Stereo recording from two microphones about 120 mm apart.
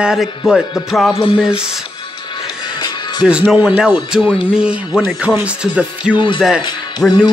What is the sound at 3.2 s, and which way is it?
Speech, 10° right (ahead or behind).